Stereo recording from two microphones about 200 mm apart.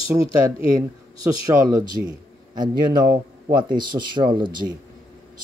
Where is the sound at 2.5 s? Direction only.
20° right (ahead or behind).